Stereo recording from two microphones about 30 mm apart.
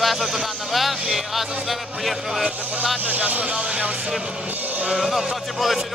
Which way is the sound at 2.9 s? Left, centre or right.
Right.